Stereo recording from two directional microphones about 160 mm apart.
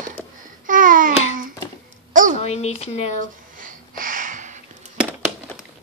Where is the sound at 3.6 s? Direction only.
60° right (ahead or behind).